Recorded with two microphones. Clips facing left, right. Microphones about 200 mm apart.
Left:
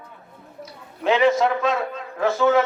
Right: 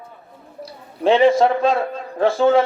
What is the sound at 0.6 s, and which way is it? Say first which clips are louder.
A man's voice: right 5 dB; 30° right (ahead or behind).